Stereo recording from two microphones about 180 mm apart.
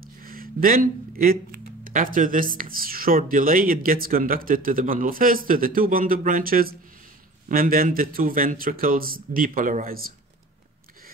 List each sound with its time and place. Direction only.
0.2 s speech: 55° right (ahead or behind)